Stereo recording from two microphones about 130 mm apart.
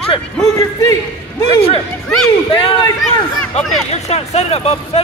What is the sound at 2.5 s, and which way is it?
Speech, 40° left (ahead or behind).